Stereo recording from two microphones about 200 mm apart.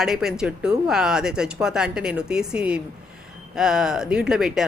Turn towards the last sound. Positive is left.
turn(degrees=0)  # may be behind; listen again after turning